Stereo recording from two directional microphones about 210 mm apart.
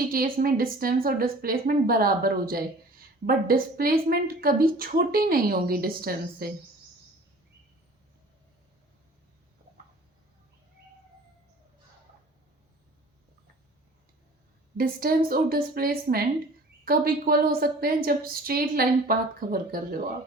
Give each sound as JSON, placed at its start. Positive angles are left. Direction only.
{"t": 0.1, "sound": "a woman's voice", "side_deg": -45}
{"t": 14.8, "sound": "a woman's voice", "side_deg": -45}